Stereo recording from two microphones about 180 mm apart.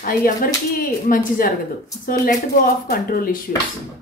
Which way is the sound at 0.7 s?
55° left (ahead or behind).